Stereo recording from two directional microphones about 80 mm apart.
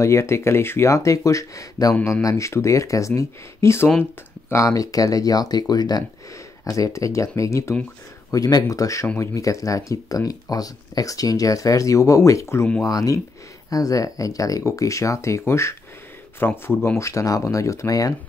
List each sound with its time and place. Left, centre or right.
0.0 s speech: left
6.6 s speech: left
17.0 s speech: left